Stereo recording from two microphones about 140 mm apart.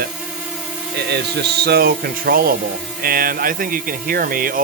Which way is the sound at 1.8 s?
90° right.